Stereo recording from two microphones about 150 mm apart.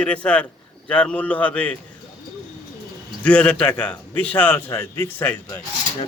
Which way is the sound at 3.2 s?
10° left (ahead or behind).